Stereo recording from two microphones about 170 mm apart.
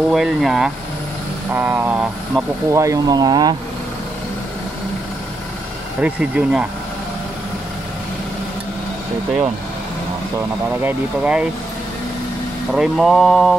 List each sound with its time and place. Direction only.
0.1 s speech: centre (ahead or behind); by 3.5 s 25° right (ahead or behind)
5.9 s speech: 5° right (ahead or behind)
10.8 s speech: 10° right (ahead or behind)
12.7 s speech: centre (ahead or behind)